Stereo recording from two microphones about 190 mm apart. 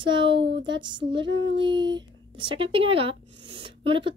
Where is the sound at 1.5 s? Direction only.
25° right (ahead or behind).